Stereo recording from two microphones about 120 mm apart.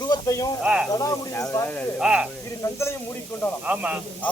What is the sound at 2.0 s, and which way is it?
Speech, 10° right (ahead or behind).